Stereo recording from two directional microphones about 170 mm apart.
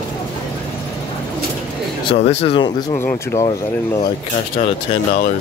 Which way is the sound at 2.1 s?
40° left (ahead or behind).